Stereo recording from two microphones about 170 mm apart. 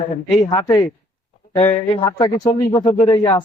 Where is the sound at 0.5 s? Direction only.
25° left (ahead or behind).